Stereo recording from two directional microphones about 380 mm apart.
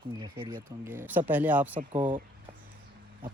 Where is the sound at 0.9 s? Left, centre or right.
Centre.